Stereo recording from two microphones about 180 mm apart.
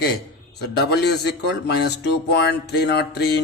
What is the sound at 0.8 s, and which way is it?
Speech, 65° left (ahead or behind).